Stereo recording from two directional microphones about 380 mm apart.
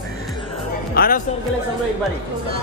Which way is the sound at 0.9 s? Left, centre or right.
Left.